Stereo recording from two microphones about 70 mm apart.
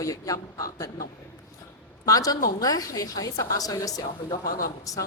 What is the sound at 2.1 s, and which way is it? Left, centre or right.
A woman's voice, left.